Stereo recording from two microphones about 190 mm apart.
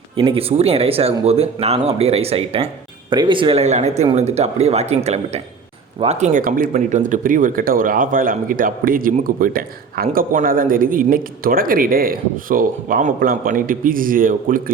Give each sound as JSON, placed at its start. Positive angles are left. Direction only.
{"t": 0.2, "sound": "speech", "side_deg": -30}